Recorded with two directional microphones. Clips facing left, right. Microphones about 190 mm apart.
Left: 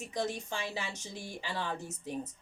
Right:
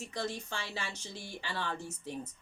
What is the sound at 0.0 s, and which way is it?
A woman's voice, 15° left (ahead or behind).